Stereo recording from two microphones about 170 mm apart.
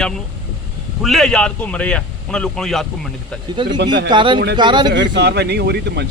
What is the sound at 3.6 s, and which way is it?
Speech, 25° right (ahead or behind).